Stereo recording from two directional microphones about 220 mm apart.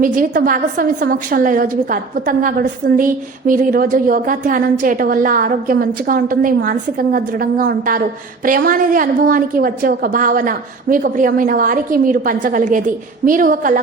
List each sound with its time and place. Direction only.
0.0 s a woman's voice: 35° right (ahead or behind)